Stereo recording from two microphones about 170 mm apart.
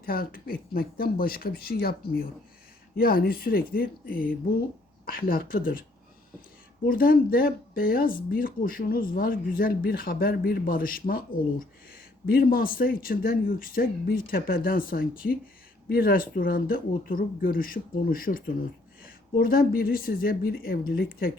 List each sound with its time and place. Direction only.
0.0 s speech: 60° left (ahead or behind)
6.8 s speech: 60° left (ahead or behind)
12.2 s speech: 60° left (ahead or behind)